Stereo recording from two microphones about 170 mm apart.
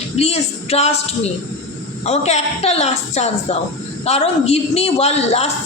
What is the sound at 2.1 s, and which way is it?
A woman's voice, 40° left (ahead or behind).